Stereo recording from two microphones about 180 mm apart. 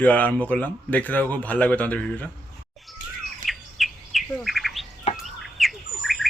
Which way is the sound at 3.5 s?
Centre (ahead or behind).